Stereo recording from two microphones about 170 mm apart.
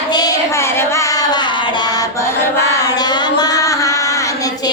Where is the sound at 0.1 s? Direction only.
20° left (ahead or behind).